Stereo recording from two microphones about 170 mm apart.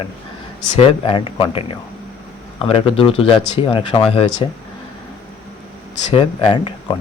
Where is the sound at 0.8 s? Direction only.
35° left (ahead or behind).